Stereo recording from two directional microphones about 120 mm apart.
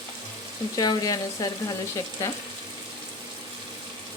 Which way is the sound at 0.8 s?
30° left (ahead or behind).